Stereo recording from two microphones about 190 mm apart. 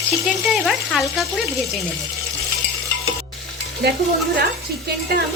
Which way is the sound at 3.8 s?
60° right (ahead or behind).